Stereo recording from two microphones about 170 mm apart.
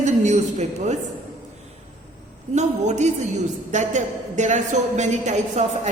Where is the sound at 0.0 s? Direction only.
45° right (ahead or behind).